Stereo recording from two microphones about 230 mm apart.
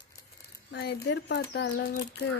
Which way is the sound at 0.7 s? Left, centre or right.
Left.